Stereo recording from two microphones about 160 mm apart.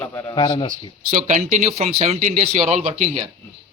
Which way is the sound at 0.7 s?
50° right (ahead or behind).